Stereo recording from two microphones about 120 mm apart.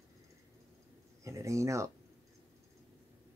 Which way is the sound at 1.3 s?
25° right (ahead or behind).